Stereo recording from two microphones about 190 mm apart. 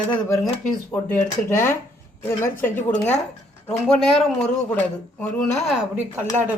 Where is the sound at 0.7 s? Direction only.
10° left (ahead or behind).